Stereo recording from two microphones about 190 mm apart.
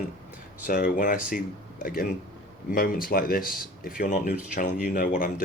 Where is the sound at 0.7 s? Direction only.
50° left (ahead or behind).